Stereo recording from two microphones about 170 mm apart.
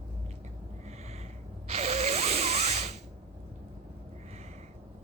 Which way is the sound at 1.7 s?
40° right (ahead or behind).